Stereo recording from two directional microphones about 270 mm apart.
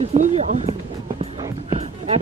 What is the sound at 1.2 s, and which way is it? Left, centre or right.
Music, right.